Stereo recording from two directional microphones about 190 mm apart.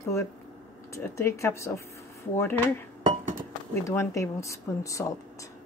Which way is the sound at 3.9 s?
15° left (ahead or behind).